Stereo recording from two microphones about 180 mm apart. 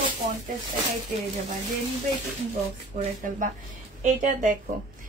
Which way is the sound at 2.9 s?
45° right (ahead or behind).